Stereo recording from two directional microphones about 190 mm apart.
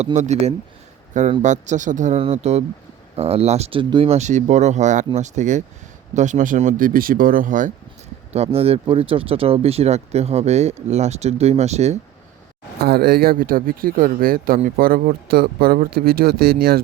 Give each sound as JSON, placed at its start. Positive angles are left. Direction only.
{"t": 0.0, "sound": "speech", "side_deg": -35}
{"t": 8.3, "sound": "speech", "side_deg": -35}
{"t": 12.8, "sound": "speech", "side_deg": -55}